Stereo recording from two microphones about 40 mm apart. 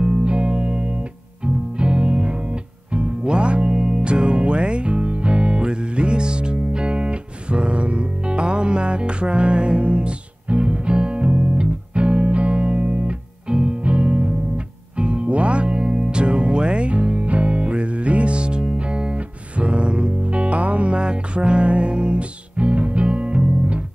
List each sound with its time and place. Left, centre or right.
0.0 s music: right